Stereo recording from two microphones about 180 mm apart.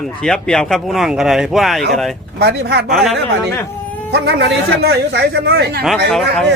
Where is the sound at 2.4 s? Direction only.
65° right (ahead or behind).